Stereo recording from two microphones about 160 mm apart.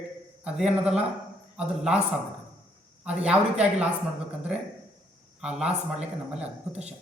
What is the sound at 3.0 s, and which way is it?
Speech, 5° right (ahead or behind).